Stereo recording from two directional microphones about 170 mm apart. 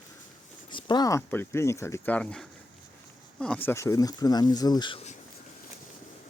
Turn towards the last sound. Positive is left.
turn(degrees=25)  # may be behind; listen again after turning